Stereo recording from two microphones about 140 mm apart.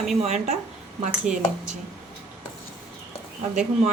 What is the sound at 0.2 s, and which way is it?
A woman's voice, 50° right (ahead or behind).